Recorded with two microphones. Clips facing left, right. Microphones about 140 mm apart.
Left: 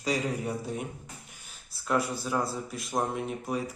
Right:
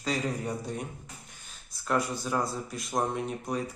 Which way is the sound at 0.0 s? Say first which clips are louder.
Left 1 dB; 10° left (ahead or behind).